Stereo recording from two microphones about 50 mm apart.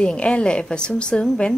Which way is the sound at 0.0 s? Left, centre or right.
Centre.